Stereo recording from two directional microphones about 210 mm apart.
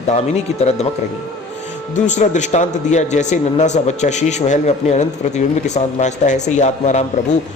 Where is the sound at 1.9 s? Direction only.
35° left (ahead or behind).